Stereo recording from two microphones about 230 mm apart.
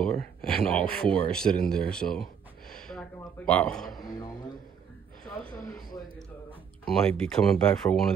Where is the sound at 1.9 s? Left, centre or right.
Centre.